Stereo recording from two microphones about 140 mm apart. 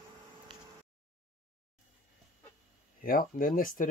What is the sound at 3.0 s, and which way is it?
Speech, 90° left.